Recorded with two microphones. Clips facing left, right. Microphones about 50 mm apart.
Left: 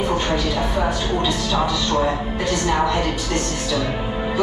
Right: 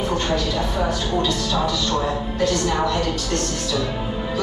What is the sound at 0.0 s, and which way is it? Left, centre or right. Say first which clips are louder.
Speech: left 1 dB; centre.